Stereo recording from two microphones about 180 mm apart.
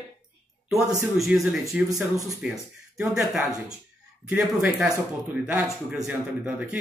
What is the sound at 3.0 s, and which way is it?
Speech, 5° right (ahead or behind).